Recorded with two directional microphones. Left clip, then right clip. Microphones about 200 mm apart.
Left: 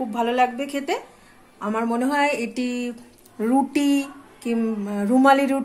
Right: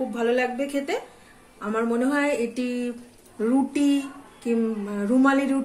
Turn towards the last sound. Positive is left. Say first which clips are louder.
# left 4 dB
turn(degrees=40)  # may be behind; listen again after turning